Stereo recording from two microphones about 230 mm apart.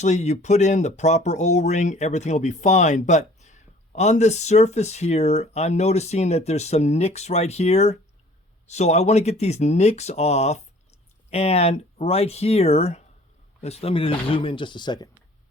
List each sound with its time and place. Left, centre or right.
0.0 s speech: left